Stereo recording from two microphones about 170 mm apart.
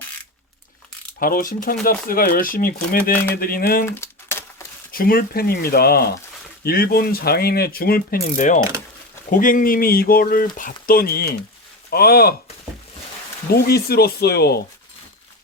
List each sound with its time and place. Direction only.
1.2 s speech: 55° left (ahead or behind)
3.8 s a sound: 15° left (ahead or behind)
4.9 s speech: 60° left (ahead or behind)
13.5 s speech: 65° left (ahead or behind)